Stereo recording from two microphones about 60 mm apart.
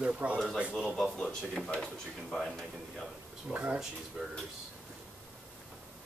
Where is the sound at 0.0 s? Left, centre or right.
Centre.